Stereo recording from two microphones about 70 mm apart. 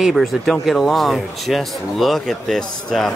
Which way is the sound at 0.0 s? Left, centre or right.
Centre.